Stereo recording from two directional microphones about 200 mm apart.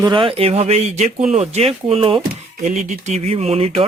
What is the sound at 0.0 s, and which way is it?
A man's voice, 25° right (ahead or behind).